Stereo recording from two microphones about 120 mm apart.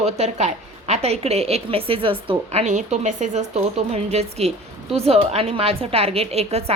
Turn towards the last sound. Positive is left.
turn(degrees=-60)  # may be behind; listen again after turning